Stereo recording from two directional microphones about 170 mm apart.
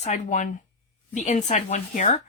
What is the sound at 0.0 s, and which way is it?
Speech, 45° left (ahead or behind).